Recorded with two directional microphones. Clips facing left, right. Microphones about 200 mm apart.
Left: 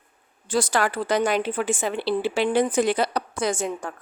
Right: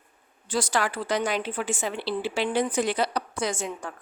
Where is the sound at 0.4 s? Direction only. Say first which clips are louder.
Left 4 dB; 45° left (ahead or behind).